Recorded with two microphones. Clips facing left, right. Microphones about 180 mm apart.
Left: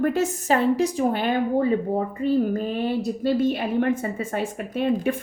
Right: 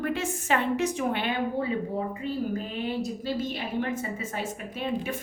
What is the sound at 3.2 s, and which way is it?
A woman's voice, 55° left (ahead or behind).